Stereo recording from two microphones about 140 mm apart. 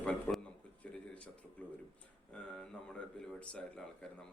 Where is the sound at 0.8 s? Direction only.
10° left (ahead or behind).